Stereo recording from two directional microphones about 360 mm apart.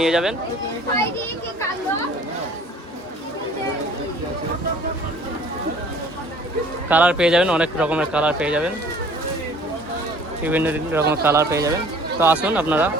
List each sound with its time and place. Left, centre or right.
0.0 s speech: centre
6.8 s speech: centre
10.4 s speech: centre